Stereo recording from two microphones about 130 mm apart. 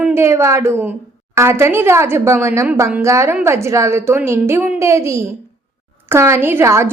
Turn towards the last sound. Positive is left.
turn(degrees=-20)  # may be behind; listen again after turning